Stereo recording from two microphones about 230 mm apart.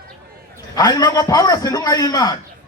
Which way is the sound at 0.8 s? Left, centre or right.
Centre.